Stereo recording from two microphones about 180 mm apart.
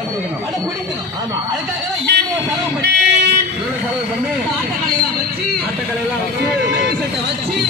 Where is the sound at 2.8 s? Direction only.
65° right (ahead or behind).